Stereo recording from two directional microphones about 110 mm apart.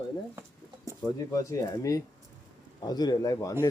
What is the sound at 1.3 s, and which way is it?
Speech, 30° left (ahead or behind).